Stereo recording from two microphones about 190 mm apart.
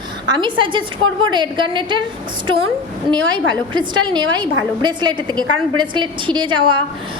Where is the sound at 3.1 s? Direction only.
25° right (ahead or behind).